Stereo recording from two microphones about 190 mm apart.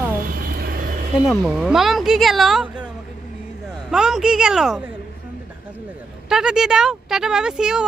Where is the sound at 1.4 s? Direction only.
5° right (ahead or behind).